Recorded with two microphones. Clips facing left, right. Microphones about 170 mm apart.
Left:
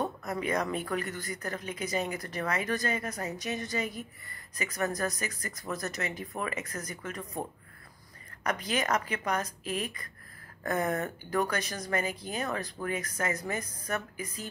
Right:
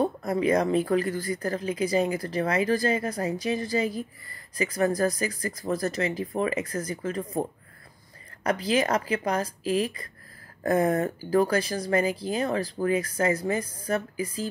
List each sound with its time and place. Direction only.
0.0 s speech: 30° right (ahead or behind)
8.5 s speech: 30° right (ahead or behind)